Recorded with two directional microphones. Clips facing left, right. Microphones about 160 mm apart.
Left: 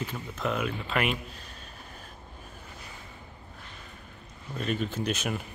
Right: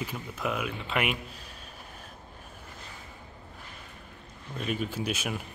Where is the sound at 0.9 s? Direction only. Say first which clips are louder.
Right 2 dB; 10° right (ahead or behind).